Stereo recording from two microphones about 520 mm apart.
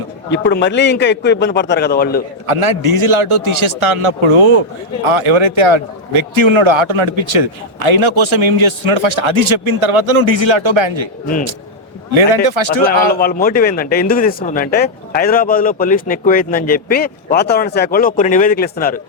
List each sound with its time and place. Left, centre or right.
0.3 s a man's voice: centre
2.5 s a man's voice: right
12.1 s a man's voice: right
13.1 s a man's voice: centre